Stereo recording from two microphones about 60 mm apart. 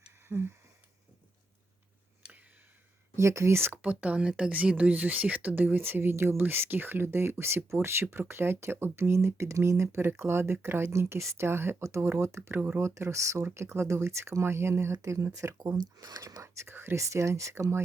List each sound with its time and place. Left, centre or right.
0.3 s a sound: right
3.2 s speech: right
3.7 s speech: right
12.5 s speech: right
12.8 s speech: right
16.6 s speech: right
17.0 s speech: right